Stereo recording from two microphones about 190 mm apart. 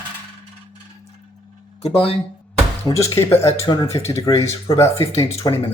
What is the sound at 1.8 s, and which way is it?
Speech, 30° left (ahead or behind).